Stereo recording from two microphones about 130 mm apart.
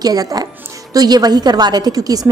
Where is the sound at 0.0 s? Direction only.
30° right (ahead or behind).